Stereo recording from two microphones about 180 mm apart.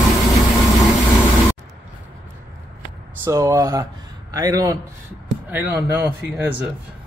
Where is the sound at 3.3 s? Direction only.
20° right (ahead or behind).